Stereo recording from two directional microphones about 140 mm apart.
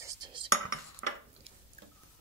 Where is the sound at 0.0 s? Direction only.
25° right (ahead or behind).